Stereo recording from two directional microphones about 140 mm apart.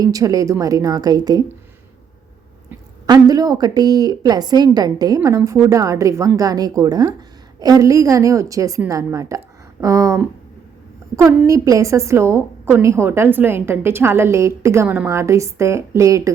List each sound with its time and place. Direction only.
0.0 s a woman's voice: 25° right (ahead or behind)
3.1 s a woman's voice: 25° right (ahead or behind)